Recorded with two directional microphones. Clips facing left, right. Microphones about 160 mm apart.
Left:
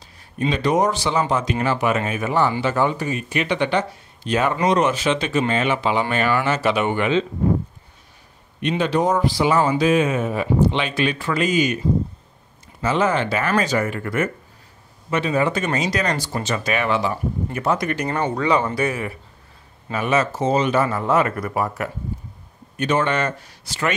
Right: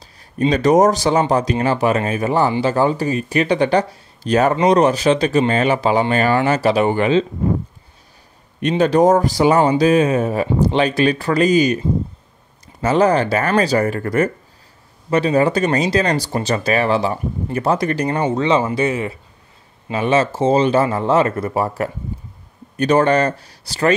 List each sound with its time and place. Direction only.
0.0 s a man's voice: 40° right (ahead or behind)
8.5 s speech: 45° right (ahead or behind)
12.8 s speech: 40° right (ahead or behind)